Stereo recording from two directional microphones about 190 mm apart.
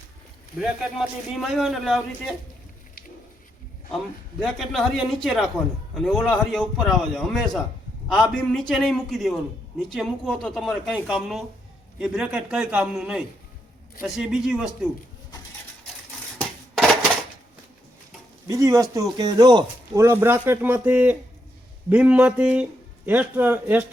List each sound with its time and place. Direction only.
0.6 s a man's voice: 5° right (ahead or behind)
3.9 s a man's voice: 5° left (ahead or behind)
16.4 s a sound: 5° left (ahead or behind)
18.4 s speech: 15° right (ahead or behind)